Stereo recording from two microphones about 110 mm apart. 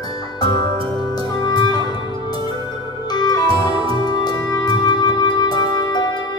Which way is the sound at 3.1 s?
40° left (ahead or behind).